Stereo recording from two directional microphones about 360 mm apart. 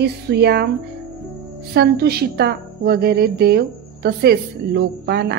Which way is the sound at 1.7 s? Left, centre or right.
Right.